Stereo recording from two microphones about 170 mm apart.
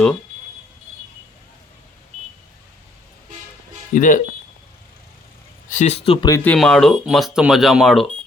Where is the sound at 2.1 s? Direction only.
45° right (ahead or behind).